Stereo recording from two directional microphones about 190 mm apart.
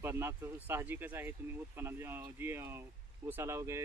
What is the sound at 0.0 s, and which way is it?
Speech, 15° right (ahead or behind).